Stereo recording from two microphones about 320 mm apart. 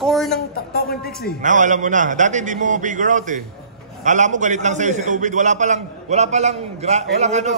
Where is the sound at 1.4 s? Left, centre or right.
Right.